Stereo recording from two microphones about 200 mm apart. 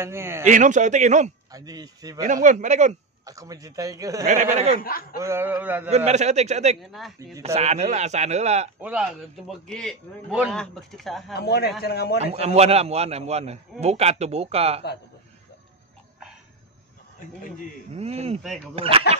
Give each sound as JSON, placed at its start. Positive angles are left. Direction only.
{"t": 0.0, "sound": "a man's voice", "side_deg": -10}
{"t": 0.5, "sound": "a man's voice", "side_deg": -40}
{"t": 1.5, "sound": "speech", "side_deg": -20}
{"t": 2.2, "sound": "a man's voice", "side_deg": -40}
{"t": 3.3, "sound": "a man's voice", "side_deg": -15}
{"t": 4.2, "sound": "a man's voice", "side_deg": -40}
{"t": 5.2, "sound": "a man's voice", "side_deg": -10}
{"t": 5.9, "sound": "a man's voice", "side_deg": -35}
{"t": 6.8, "sound": "a man's voice", "side_deg": 0}
{"t": 7.4, "sound": "a man's voice", "side_deg": -35}
{"t": 8.8, "sound": "a man's voice", "side_deg": -5}
{"t": 11.3, "sound": "speech", "side_deg": 55}
{"t": 12.2, "sound": "a man's voice", "side_deg": -30}
{"t": 17.9, "sound": "a man's voice", "side_deg": -30}